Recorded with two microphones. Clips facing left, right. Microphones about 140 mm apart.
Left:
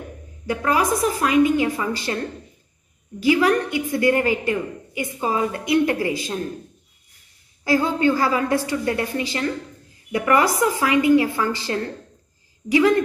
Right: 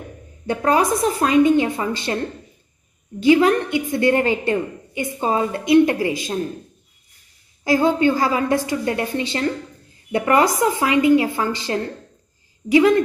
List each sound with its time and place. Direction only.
0.5 s a woman's voice: 25° right (ahead or behind)
3.2 s a woman's voice: 25° right (ahead or behind)
7.6 s a woman's voice: 20° right (ahead or behind)